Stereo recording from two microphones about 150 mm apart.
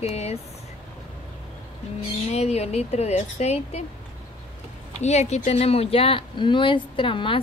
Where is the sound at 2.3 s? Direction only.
45° left (ahead or behind).